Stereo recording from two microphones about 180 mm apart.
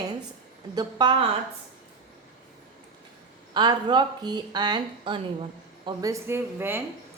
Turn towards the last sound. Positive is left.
turn(degrees=-10)  # may be behind; listen again after turning